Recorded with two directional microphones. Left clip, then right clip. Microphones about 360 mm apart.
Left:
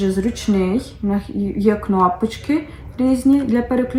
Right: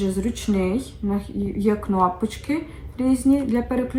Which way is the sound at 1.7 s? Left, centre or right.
Centre.